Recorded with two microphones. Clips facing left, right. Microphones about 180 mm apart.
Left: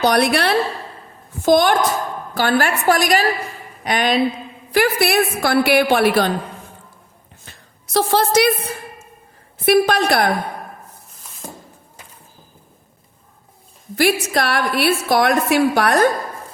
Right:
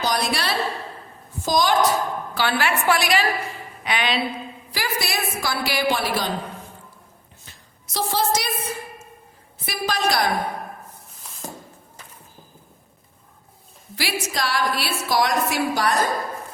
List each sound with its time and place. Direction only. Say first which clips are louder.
0.0 s a woman's voice: left 8 dB; 65° left (ahead or behind)
2.3 s a woman's voice: left 6 dB; 45° left (ahead or behind)
4.7 s a woman's voice: left 11 dB; 60° left (ahead or behind)
7.4 s a sound: left 4 dB; 60° left (ahead or behind)
9.6 s a woman's voice: left 10 dB; 60° left (ahead or behind)
13.9 s a woman's voice: left 10 dB; 50° left (ahead or behind)